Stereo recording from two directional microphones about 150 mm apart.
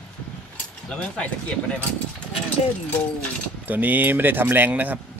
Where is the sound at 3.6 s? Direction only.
10° right (ahead or behind).